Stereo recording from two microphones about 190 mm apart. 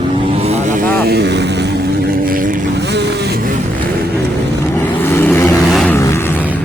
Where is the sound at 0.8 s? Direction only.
55° right (ahead or behind).